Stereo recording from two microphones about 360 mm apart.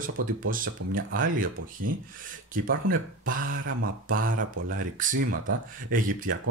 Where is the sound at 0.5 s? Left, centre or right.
Right.